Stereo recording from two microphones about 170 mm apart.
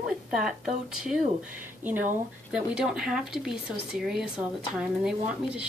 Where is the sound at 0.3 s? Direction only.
5° right (ahead or behind).